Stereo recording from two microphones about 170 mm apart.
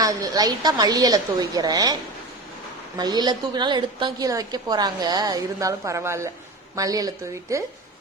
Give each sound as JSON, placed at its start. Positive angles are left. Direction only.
{"t": 0.0, "sound": "a woman's voice", "side_deg": -20}
{"t": 3.0, "sound": "a woman's voice", "side_deg": -25}